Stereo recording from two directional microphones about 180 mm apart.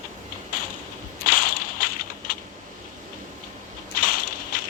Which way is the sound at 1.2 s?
50° left (ahead or behind).